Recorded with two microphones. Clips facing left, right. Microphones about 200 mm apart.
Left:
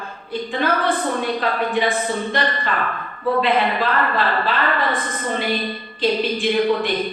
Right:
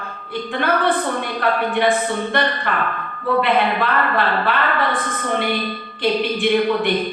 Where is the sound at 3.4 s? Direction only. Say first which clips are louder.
Right 1 dB; 60° right (ahead or behind).